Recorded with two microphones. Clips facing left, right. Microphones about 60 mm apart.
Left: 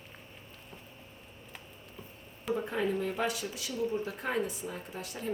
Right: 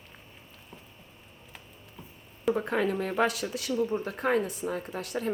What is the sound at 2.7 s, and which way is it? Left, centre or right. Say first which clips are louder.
Speech: right 3 dB; right.